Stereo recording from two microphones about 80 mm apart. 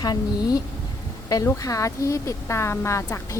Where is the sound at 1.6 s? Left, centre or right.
Left.